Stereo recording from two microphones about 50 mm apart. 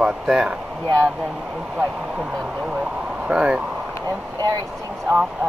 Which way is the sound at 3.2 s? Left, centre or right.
Centre.